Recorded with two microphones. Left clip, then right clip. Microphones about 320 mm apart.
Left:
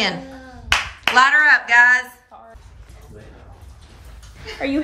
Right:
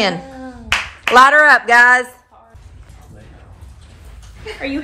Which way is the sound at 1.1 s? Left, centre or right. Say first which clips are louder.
Right 5 dB; centre.